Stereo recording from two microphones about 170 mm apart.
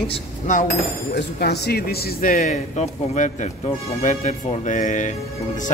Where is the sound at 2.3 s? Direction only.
45° left (ahead or behind).